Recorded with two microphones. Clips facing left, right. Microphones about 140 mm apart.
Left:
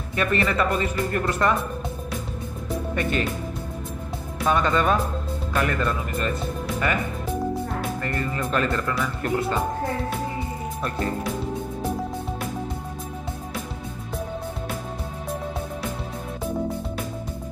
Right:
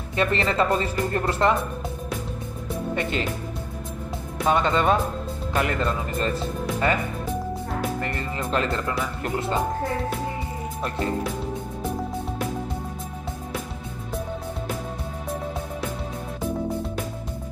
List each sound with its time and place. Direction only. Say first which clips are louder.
0.1 s speech: even; 25° right (ahead or behind)
2.9 s speech: left 1 dB; 25° right (ahead or behind)
4.5 s speech: right 1 dB; 25° right (ahead or behind)